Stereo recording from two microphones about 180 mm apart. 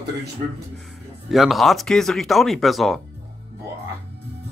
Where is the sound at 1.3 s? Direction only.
Centre (ahead or behind).